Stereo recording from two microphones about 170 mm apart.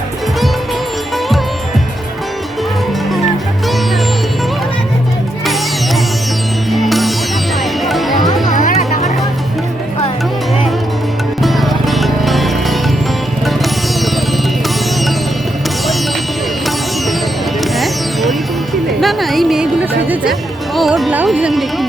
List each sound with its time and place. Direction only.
6.7 s music: centre (ahead or behind)
8.5 s music: 50° left (ahead or behind)
11.4 s music: centre (ahead or behind)
17.6 s music: centre (ahead or behind)
20.7 s carnatic music: centre (ahead or behind)